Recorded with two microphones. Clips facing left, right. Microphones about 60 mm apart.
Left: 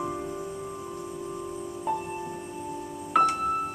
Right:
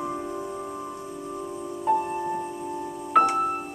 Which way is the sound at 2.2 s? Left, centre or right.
Right.